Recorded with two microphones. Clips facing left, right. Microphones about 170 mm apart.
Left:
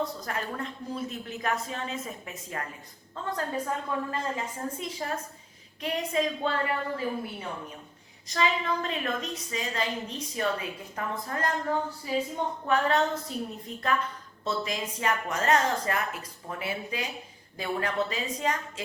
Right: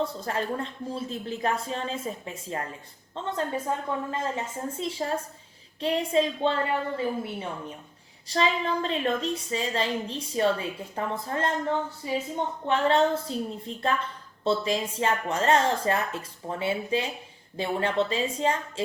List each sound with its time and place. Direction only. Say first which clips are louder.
0.0 s a woman's voice: right 3 dB; 30° right (ahead or behind)
8.3 s a woman's voice: right 2 dB; 30° right (ahead or behind)